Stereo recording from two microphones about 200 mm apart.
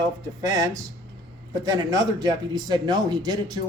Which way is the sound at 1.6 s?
20° right (ahead or behind).